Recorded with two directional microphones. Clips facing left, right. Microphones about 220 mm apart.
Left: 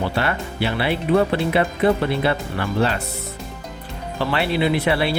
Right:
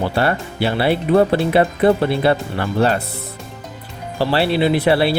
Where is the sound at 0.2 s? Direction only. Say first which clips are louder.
Right 4 dB; 35° right (ahead or behind).